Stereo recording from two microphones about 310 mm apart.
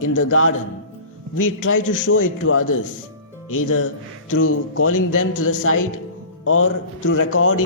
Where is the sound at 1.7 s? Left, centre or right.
Left.